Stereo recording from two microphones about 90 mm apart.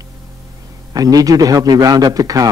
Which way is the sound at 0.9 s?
45° right (ahead or behind).